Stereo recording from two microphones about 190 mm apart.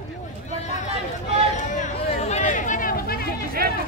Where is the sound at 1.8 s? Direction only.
35° left (ahead or behind).